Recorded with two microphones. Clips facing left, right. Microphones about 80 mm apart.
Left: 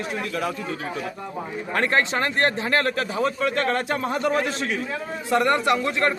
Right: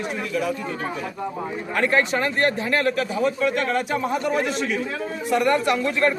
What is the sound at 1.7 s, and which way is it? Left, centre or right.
Speech, left.